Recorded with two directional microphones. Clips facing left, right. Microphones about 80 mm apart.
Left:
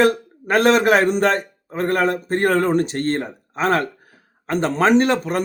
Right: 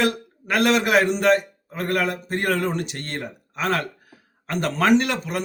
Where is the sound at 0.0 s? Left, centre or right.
Left.